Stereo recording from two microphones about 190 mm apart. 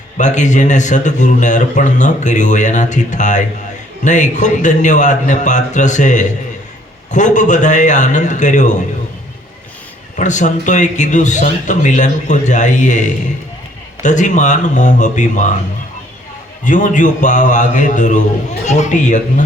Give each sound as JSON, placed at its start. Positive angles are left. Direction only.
{"t": 0.2, "sound": "speech", "side_deg": 40}
{"t": 10.2, "sound": "speech", "side_deg": 40}
{"t": 16.6, "sound": "speech", "side_deg": 40}